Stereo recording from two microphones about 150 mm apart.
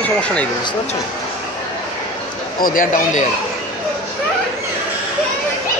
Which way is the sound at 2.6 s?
70° left (ahead or behind).